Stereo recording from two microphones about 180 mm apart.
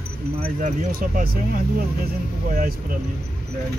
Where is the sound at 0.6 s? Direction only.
45° right (ahead or behind).